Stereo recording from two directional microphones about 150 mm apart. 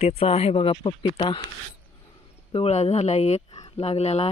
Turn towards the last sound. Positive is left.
turn(degrees=45)  # may be behind; listen again after turning